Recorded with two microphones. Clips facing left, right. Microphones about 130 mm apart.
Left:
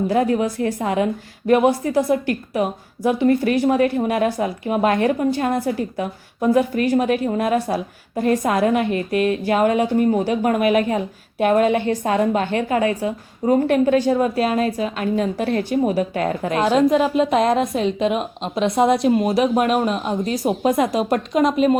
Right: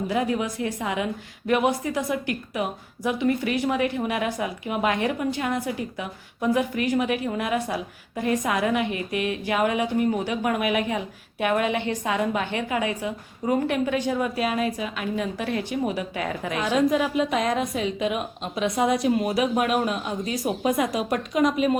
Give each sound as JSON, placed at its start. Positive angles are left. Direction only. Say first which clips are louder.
{"t": 0.1, "sound": "a woman's voice", "louder": "left 4 dB", "side_deg": 40}
{"t": 16.7, "sound": "a woman's voice", "louder": "left 4 dB", "side_deg": 30}